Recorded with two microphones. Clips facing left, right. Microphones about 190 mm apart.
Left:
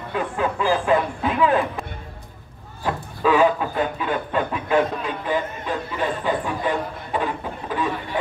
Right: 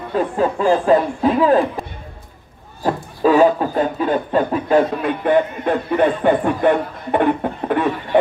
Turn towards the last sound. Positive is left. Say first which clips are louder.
# right 7 dB
turn(degrees=-60)  # may be behind; listen again after turning